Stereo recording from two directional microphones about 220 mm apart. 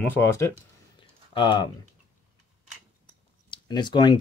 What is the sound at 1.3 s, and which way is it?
Speech, 20° left (ahead or behind).